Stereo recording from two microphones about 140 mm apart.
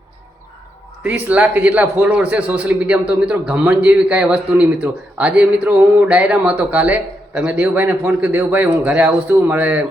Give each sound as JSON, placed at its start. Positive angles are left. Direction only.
{"t": 1.0, "sound": "a man's voice", "side_deg": -10}